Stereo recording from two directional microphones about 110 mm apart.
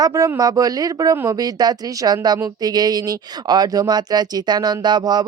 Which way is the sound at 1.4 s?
35° right (ahead or behind).